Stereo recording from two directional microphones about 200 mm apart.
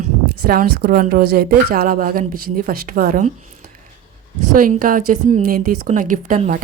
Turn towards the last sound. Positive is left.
turn(degrees=-40)  # may be behind; listen again after turning